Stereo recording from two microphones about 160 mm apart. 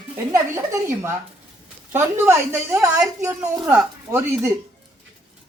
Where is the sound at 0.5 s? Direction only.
20° right (ahead or behind).